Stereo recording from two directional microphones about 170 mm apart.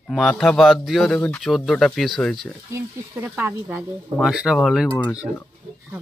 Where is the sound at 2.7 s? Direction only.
15° right (ahead or behind).